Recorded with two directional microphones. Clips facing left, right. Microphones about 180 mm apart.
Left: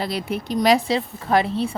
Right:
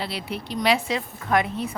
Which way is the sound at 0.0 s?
45° left (ahead or behind).